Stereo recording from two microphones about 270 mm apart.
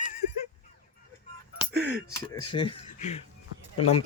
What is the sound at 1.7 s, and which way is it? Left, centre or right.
Speech, centre.